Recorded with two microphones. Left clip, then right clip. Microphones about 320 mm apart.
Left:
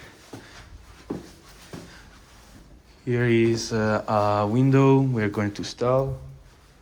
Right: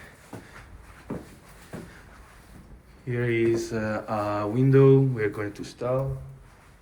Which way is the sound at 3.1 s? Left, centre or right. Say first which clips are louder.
Left 3 dB; centre.